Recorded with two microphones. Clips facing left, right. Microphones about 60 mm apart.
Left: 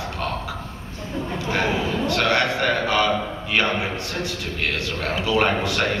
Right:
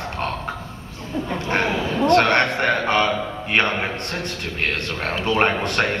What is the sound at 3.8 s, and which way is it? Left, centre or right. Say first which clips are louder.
A man's voice: right 1 dB; right.